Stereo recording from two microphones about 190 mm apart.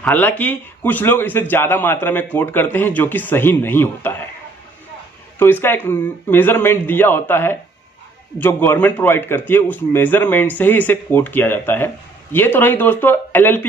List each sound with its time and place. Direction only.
0.0 s a man's voice: 10° left (ahead or behind)
5.4 s a man's voice: 10° left (ahead or behind)